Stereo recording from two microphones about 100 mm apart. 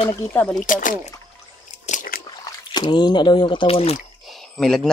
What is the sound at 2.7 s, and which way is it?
Speech, 50° left (ahead or behind).